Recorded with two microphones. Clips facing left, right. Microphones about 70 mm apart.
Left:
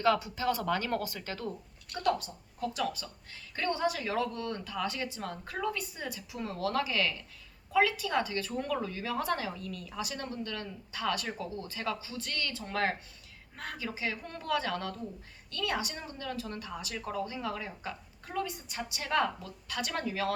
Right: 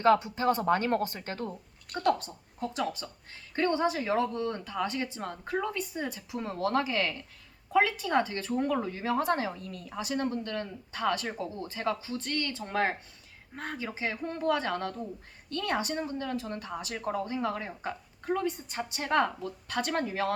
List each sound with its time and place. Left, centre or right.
0.0 s a woman's voice: right
1.5 s speech: right
2.0 s a woman's voice: right